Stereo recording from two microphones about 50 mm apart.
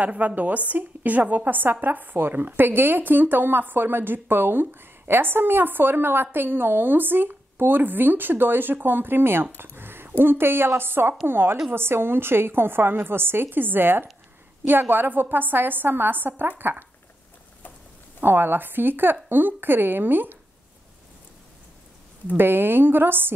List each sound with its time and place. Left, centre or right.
0.0 s a woman's voice: right
9.8 s a sound: right
10.1 s a woman's voice: right
18.2 s speech: right
22.4 s speech: right